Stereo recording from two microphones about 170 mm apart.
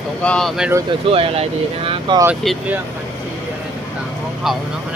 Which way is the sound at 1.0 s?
35° right (ahead or behind).